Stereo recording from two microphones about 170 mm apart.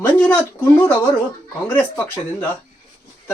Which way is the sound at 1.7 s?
15° left (ahead or behind).